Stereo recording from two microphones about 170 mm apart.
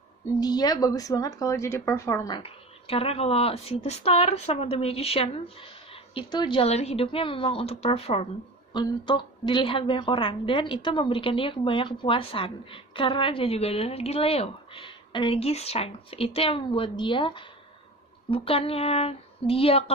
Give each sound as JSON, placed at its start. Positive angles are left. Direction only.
{"t": 0.4, "sound": "a woman's voice", "side_deg": 25}
{"t": 2.3, "sound": "a woman's voice", "side_deg": 35}